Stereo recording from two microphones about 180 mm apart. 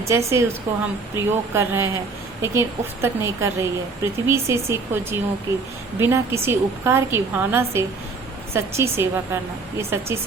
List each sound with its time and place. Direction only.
0.0 s speech: 15° right (ahead or behind)